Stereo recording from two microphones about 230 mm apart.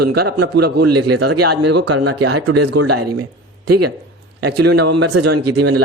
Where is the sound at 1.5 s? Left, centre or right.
Right.